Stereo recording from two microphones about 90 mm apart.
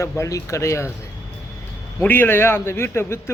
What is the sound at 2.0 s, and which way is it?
Speech, 20° left (ahead or behind).